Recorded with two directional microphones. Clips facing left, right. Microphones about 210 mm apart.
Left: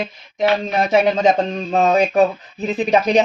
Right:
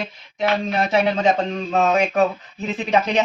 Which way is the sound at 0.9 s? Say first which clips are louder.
Left 4 dB; 20° left (ahead or behind).